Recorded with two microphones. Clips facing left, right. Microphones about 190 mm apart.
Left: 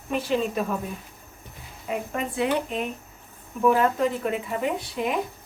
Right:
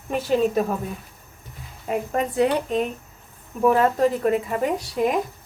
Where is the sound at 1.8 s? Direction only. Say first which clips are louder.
Right 5 dB; 40° right (ahead or behind).